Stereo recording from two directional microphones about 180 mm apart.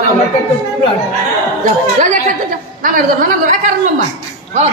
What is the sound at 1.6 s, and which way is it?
A woman's voice, 45° right (ahead or behind).